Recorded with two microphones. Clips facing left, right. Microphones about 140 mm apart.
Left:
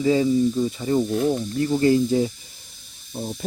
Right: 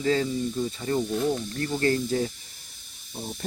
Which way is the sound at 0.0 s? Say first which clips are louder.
Left 7 dB; 10° left (ahead or behind).